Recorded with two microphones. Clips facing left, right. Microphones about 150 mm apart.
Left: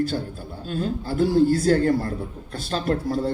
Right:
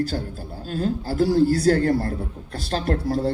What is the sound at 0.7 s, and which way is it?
Speech, 40° right (ahead or behind).